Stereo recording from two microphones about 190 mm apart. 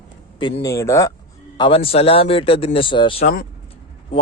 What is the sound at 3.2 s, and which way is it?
Speech, 50° left (ahead or behind).